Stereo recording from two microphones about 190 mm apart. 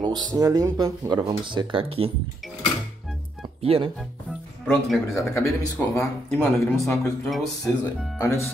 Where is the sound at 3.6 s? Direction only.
30° right (ahead or behind).